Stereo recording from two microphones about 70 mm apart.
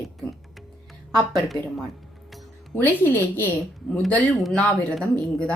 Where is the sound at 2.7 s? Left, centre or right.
Left.